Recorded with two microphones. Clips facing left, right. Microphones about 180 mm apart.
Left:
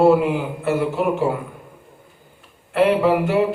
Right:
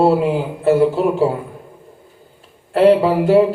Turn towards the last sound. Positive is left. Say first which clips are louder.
# right 5 dB
turn(degrees=-30)  # may be behind; listen again after turning